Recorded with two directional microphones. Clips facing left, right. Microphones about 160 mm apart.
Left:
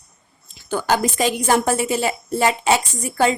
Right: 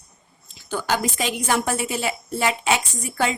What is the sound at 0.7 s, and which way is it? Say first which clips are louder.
A woman's voice: left 4 dB; 45° left (ahead or behind).